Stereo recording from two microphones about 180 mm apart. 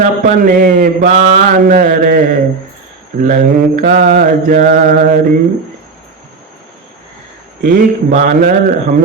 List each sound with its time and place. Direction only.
0.0 s mantra: 50° right (ahead or behind)
7.6 s mantra: 50° right (ahead or behind)